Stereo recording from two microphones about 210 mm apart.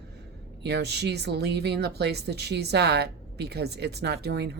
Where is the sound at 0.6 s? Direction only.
50° right (ahead or behind).